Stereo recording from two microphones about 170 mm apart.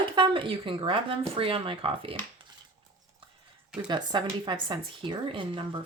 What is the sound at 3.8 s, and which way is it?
Speech, 25° right (ahead or behind).